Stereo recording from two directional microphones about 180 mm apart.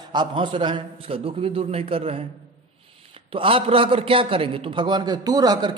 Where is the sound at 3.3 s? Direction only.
30° right (ahead or behind).